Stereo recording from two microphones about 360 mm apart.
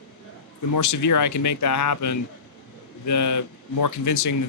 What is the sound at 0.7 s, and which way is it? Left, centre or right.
Speech, left.